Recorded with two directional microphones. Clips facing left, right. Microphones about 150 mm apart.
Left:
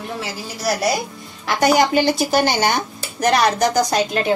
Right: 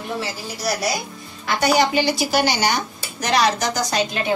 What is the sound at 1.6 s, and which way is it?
Speech, 50° left (ahead or behind).